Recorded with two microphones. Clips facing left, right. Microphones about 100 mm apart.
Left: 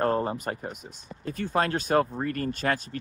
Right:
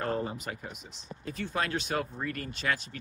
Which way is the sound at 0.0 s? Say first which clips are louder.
Left 7 dB; 45° left (ahead or behind).